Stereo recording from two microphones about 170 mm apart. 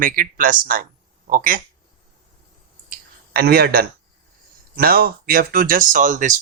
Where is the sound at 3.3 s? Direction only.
65° right (ahead or behind).